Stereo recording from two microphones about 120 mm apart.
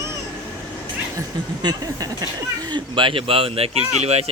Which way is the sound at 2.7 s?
45° right (ahead or behind).